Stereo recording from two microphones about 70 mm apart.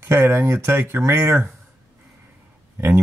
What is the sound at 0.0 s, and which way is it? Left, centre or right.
Speech, right.